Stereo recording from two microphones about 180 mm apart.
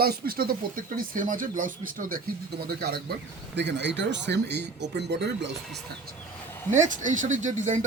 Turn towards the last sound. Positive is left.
turn(degrees=-45)  # may be behind; listen again after turning